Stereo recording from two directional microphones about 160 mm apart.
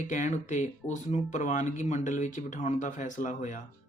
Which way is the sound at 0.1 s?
50° left (ahead or behind).